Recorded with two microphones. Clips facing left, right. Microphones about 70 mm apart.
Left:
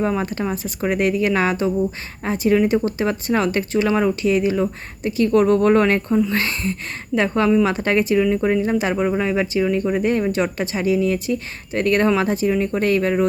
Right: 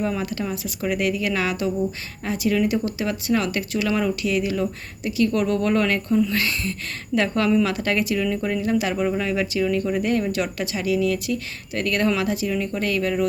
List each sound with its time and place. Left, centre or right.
0.0 s speech: left